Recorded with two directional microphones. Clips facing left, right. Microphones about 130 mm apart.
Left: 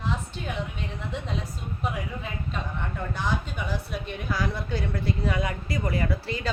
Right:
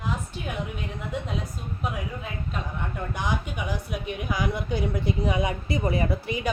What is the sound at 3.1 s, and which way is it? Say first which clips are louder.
A woman's voice: right 1 dB; 15° right (ahead or behind).